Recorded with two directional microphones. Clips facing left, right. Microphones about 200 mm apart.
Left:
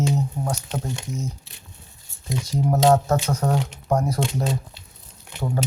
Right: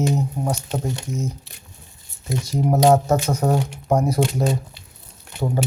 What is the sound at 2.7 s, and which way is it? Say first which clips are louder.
Speech: right 2 dB; 10° right (ahead or behind).